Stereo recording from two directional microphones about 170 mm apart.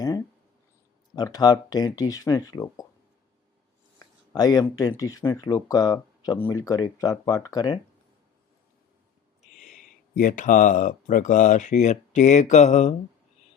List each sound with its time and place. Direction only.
1.1 s speech: 25° left (ahead or behind)
4.3 s speech: 25° left (ahead or behind)
10.2 s speech: 50° left (ahead or behind)